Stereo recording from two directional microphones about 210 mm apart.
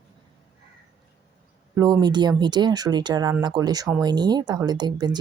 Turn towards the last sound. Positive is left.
turn(degrees=-20)  # may be behind; listen again after turning